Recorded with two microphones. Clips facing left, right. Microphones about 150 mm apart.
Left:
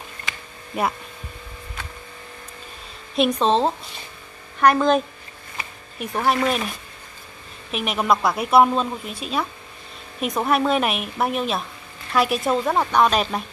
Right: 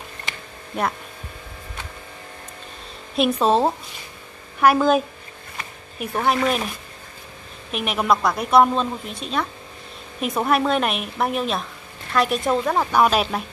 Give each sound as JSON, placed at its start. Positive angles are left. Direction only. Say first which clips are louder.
{"t": 0.7, "sound": "a woman's voice", "louder": "left 1 dB", "side_deg": 5}
{"t": 3.2, "sound": "a woman's voice", "louder": "right 1 dB", "side_deg": -5}
{"t": 7.7, "sound": "a woman's voice", "louder": "even", "side_deg": 0}